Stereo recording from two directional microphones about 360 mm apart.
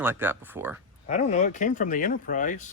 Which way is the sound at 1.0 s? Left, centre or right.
Left.